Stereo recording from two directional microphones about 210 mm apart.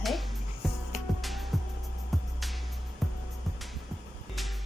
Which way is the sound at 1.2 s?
Centre (ahead or behind).